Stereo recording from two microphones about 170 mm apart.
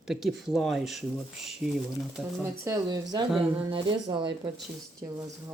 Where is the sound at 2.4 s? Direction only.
15° right (ahead or behind).